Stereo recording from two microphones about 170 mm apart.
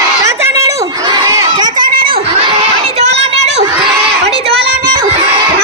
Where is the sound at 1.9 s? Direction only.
60° right (ahead or behind).